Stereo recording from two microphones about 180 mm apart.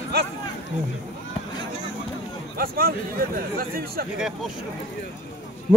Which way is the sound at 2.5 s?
55° right (ahead or behind).